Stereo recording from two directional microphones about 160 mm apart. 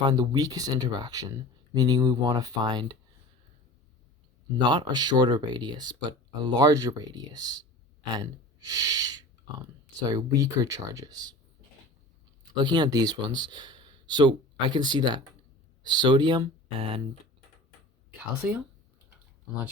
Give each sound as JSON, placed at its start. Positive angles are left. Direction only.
{"t": 0.0, "sound": "speech", "side_deg": -25}
{"t": 4.5, "sound": "speech", "side_deg": -25}
{"t": 12.5, "sound": "speech", "side_deg": -30}